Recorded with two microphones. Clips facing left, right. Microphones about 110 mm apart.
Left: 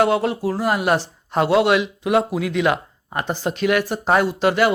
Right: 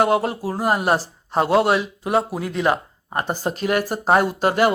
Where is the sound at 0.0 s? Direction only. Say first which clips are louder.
Left 1 dB; 40° right (ahead or behind).